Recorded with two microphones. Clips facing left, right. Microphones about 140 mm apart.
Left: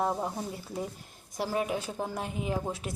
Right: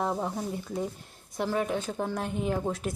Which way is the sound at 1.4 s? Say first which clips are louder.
Right 2 dB; 5° left (ahead or behind).